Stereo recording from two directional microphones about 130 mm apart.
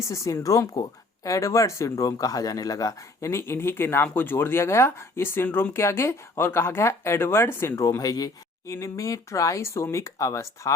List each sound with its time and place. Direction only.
0.0 s speech: 25° left (ahead or behind)